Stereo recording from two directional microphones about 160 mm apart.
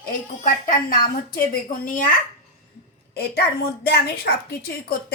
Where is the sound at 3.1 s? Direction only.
80° left.